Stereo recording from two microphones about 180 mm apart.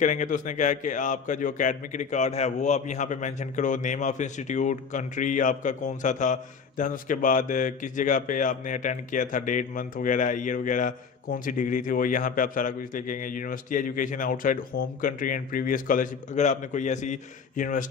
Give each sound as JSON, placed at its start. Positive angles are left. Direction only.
{"t": 0.0, "sound": "a man's voice", "side_deg": 45}